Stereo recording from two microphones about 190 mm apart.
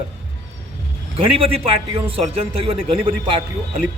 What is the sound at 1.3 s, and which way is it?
Speech, 30° right (ahead or behind).